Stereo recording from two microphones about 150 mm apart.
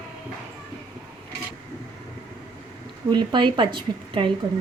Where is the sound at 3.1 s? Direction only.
30° right (ahead or behind).